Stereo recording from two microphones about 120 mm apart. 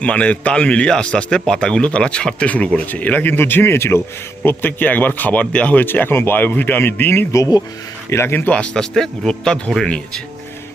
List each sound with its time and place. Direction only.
0.0 s speech: 10° left (ahead or behind)